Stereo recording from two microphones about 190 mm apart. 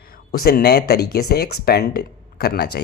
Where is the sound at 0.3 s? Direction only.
55° left (ahead or behind).